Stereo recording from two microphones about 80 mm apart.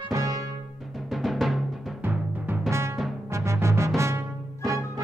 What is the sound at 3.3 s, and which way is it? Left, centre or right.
Music, right.